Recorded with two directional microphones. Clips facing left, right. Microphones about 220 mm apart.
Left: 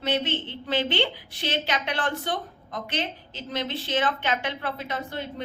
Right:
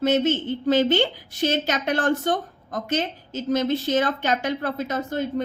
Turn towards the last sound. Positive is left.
turn(degrees=-45)  # may be behind; listen again after turning